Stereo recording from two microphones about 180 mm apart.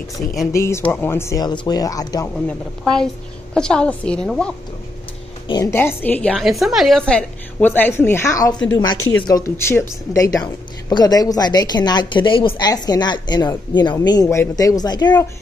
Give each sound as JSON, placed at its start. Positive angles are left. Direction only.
{"t": 0.5, "sound": "a woman's voice", "side_deg": 15}
{"t": 2.3, "sound": "a woman's voice", "side_deg": 5}
{"t": 5.5, "sound": "a woman's voice", "side_deg": 15}